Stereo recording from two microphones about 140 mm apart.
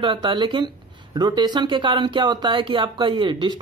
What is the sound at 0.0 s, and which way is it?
Speech, 35° right (ahead or behind).